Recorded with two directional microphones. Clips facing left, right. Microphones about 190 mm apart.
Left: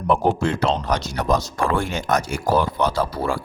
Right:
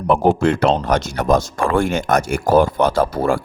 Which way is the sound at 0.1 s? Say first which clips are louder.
Right 5 dB; 60° right (ahead or behind).